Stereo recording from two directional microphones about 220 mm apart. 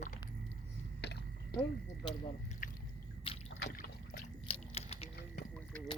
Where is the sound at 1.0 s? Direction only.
50° left (ahead or behind).